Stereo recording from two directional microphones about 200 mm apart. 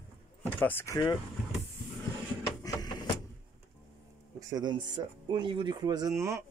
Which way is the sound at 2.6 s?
20° left (ahead or behind).